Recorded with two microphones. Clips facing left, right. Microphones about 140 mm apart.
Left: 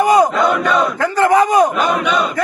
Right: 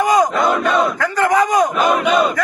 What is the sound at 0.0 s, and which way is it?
Battle cry, 30° left (ahead or behind).